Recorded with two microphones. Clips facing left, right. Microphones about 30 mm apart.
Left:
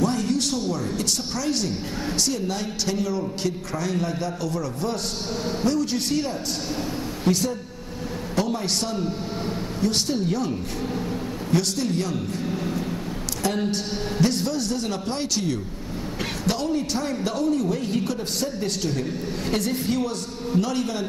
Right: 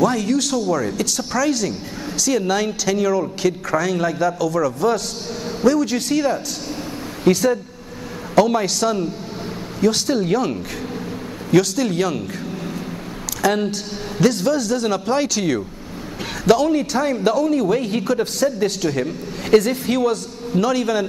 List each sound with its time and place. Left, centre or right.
0.0 s speech: right
10.2 s a man's voice: right
11.5 s a man's voice: right
13.4 s speech: right
16.6 s a man's voice: right
17.5 s a man's voice: right